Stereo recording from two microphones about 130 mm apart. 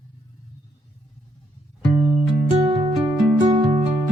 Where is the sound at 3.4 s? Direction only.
40° right (ahead or behind).